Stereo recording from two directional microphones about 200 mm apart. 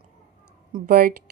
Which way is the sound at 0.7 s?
45° right (ahead or behind).